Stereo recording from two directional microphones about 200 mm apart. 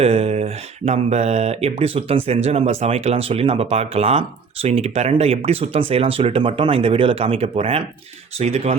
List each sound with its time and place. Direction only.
0.0 s speech: 30° right (ahead or behind)